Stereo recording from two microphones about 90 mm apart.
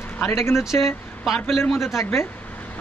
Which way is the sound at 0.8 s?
Centre (ahead or behind).